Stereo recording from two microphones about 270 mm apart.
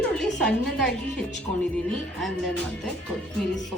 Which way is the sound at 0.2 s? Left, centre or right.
Centre.